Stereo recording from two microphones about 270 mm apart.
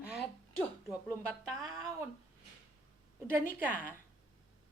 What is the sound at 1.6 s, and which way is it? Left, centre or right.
Speech, centre.